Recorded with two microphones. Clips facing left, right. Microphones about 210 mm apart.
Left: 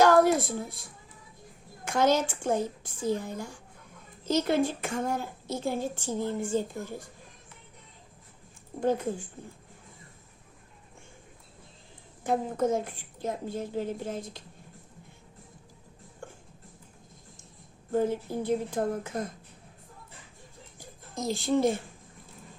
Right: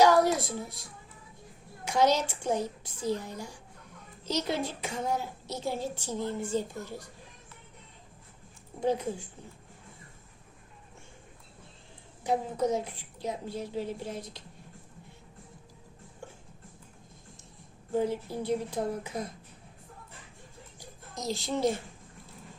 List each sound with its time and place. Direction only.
0.0 s a woman's voice: 55° left (ahead or behind)
8.8 s a woman's voice: 50° left (ahead or behind)
12.2 s a woman's voice: 50° left (ahead or behind)
17.9 s a woman's voice: 50° left (ahead or behind)
20.7 s a sound: 50° left (ahead or behind)